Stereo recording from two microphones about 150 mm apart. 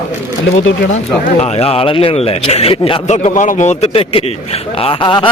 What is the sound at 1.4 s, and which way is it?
Speech, 40° left (ahead or behind).